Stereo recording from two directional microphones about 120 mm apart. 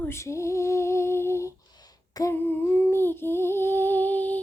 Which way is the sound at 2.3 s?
15° left (ahead or behind).